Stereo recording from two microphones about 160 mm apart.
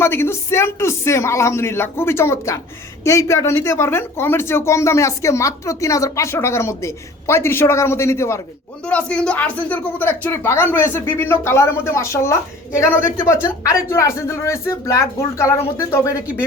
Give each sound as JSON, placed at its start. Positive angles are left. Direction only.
{"t": 0.0, "sound": "speech", "side_deg": 15}